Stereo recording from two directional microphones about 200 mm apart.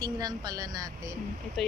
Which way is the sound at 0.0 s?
20° right (ahead or behind).